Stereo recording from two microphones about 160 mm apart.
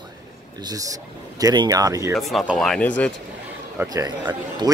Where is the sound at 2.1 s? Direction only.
Centre (ahead or behind).